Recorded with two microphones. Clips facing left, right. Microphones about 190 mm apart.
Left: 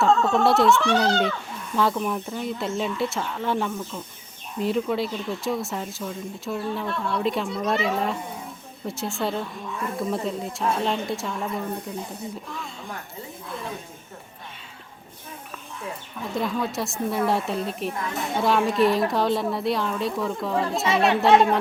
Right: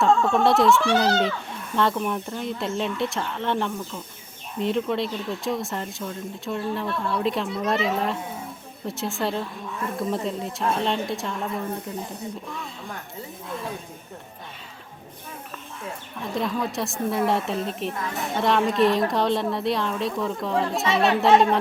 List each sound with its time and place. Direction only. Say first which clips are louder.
0.0 s a child's voice: even; centre (ahead or behind)
16.2 s speech: even; centre (ahead or behind)